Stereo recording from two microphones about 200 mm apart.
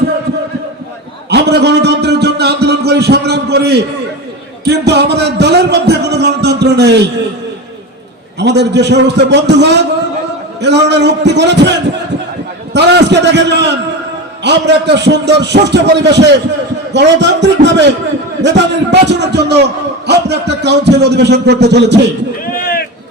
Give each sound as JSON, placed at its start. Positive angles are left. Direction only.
{"t": 1.3, "sound": "a sound", "side_deg": -55}
{"t": 8.4, "sound": "a man's voice", "side_deg": -60}
{"t": 22.5, "sound": "run", "side_deg": 50}